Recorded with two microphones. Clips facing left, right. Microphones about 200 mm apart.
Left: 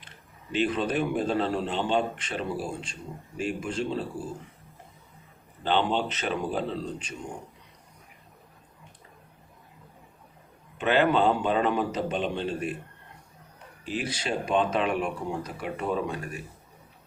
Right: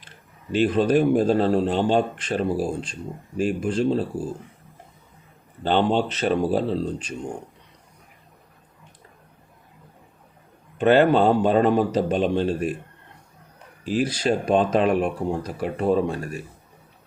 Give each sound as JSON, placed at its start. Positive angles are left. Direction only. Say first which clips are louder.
{"t": 0.5, "sound": "speech", "louder": "right 7 dB", "side_deg": -40}
{"t": 5.6, "sound": "speech", "louder": "right 5 dB", "side_deg": -40}
{"t": 10.8, "sound": "speech", "louder": "right 6 dB", "side_deg": -40}
{"t": 13.8, "sound": "speech", "louder": "right 9 dB", "side_deg": -40}